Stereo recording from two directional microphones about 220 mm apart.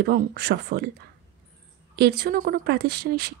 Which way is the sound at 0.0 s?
45° right (ahead or behind).